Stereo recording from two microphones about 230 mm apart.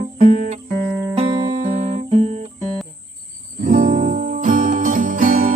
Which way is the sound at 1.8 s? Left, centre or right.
Right.